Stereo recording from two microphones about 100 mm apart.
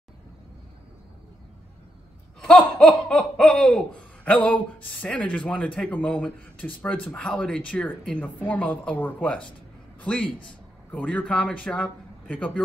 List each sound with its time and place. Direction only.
2.4 s laughter: 10° left (ahead or behind)